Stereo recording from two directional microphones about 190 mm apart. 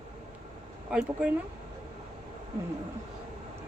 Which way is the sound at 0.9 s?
5° right (ahead or behind).